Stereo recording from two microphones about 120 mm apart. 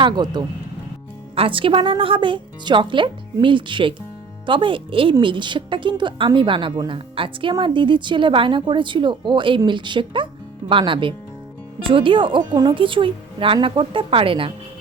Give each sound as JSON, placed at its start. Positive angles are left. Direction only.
{"t": 0.0, "sound": "a woman's voice", "side_deg": -35}